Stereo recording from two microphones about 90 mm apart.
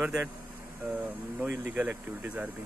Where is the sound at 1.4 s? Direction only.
20° right (ahead or behind).